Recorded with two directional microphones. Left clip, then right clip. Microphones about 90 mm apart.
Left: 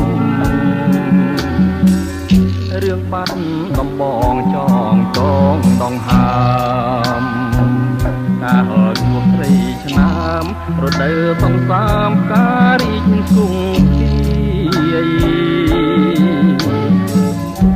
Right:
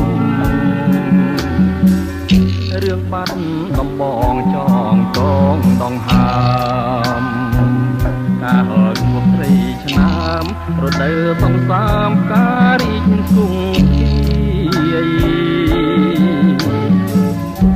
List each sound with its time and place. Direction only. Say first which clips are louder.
0.2 s music: left 1 dB; 45° right (ahead or behind)
4.3 s music: left 1 dB; 40° right (ahead or behind)
8.5 s music: left 1 dB; 40° right (ahead or behind)